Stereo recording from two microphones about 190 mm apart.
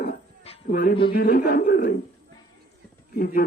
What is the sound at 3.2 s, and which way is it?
Speech, 50° left (ahead or behind).